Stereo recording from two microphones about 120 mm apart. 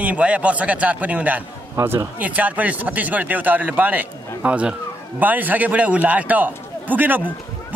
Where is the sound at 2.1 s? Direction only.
15° right (ahead or behind).